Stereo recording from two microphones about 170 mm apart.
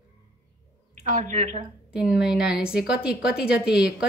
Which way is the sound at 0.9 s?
50° right (ahead or behind).